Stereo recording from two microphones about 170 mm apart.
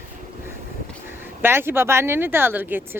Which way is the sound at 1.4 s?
15° right (ahead or behind).